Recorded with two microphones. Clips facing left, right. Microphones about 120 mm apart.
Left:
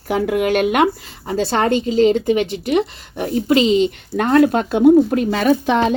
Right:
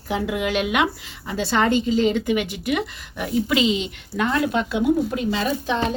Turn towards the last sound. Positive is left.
turn(degrees=65)  # may be behind; listen again after turning